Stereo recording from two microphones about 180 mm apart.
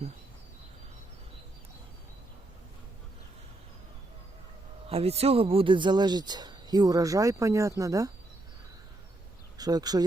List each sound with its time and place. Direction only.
4.9 s speech: 35° right (ahead or behind); by 8.1 s 20° right (ahead or behind)
9.6 s speech: 20° right (ahead or behind)